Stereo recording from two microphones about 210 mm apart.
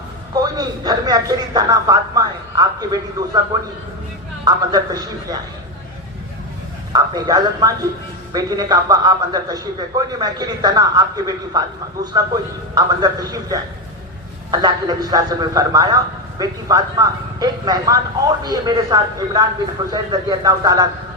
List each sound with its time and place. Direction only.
0.4 s speech: 20° right (ahead or behind)
4.4 s speech: 20° right (ahead or behind)
6.9 s speech: 20° right (ahead or behind)